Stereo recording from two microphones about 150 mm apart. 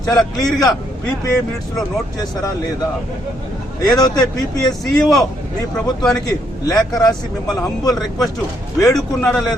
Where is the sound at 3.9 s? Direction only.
25° left (ahead or behind).